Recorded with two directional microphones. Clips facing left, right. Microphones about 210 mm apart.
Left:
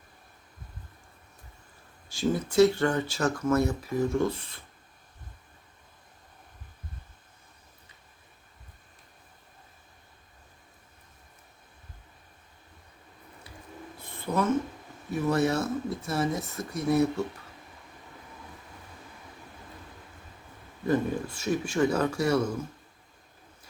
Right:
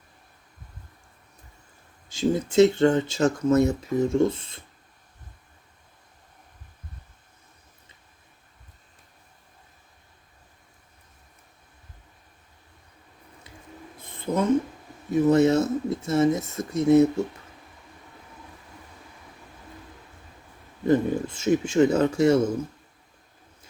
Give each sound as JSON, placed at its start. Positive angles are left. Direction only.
{"t": 2.0, "sound": "speech", "side_deg": -20}
{"t": 14.3, "sound": "speech", "side_deg": -20}
{"t": 20.8, "sound": "speech", "side_deg": -20}